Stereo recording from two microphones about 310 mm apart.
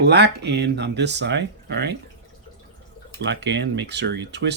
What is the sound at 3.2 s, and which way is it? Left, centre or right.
Speech, right.